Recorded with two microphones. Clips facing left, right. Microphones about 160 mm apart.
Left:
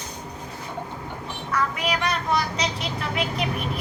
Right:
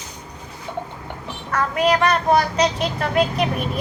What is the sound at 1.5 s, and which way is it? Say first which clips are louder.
A woman's voice: right 7 dB; 50° right (ahead or behind).